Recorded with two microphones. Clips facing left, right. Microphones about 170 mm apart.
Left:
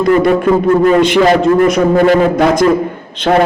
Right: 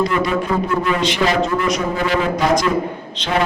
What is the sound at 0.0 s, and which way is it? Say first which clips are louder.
A man's voice: left 9 dB; 55° left (ahead or behind).